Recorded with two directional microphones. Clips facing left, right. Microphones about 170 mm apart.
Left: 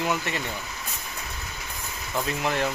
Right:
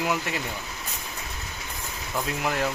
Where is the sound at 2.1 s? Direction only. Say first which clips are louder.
Left 1 dB; 5° right (ahead or behind).